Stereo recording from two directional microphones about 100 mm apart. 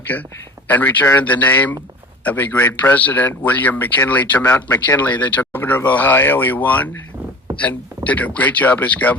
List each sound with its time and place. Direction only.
0.1 s a man's voice: 15° left (ahead or behind)